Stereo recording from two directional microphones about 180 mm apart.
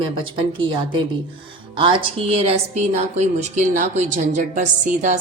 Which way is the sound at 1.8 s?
30° right (ahead or behind).